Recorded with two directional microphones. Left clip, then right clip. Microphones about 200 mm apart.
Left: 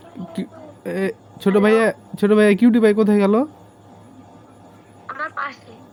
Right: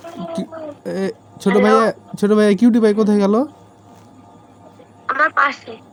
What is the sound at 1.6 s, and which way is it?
Speech, 10° right (ahead or behind).